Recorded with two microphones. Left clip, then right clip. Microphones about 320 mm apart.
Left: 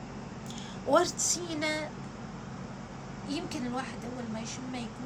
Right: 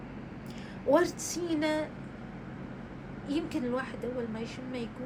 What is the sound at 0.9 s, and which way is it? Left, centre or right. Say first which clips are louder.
Speech: even; centre.